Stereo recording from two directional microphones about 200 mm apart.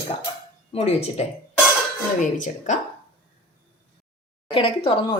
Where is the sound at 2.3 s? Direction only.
40° left (ahead or behind).